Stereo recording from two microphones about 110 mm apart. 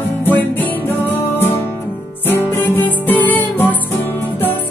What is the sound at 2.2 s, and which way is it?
Music, 20° left (ahead or behind).